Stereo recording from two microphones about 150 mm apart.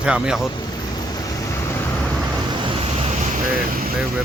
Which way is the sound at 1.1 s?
20° left (ahead or behind).